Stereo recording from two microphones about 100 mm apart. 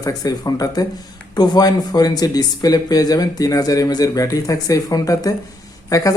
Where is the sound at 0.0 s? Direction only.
35° left (ahead or behind).